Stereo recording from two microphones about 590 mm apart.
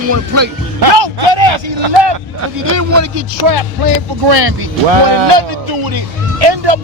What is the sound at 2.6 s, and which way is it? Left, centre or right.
Speech, right.